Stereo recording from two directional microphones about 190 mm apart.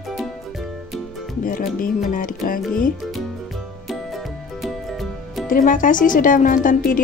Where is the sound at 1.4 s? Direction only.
45° left (ahead or behind).